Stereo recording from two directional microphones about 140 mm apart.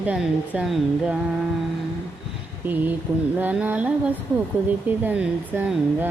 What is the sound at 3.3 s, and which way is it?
Speech, 10° right (ahead or behind).